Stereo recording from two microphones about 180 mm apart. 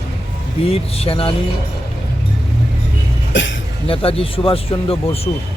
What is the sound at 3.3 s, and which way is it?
Speech, 90° left.